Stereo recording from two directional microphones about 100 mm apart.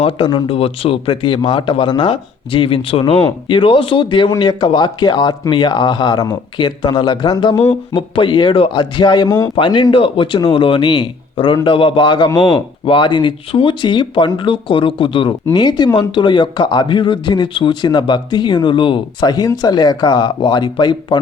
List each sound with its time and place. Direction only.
0.3 s speech: 50° left (ahead or behind)
0.5 s speech: 70° left (ahead or behind); by 2.0 s 50° left (ahead or behind)
2.0 s speech: 65° left (ahead or behind)
4.3 s speech: 45° left (ahead or behind)
7.7 s speech: 60° left (ahead or behind)
15.5 s speech: 45° left (ahead or behind)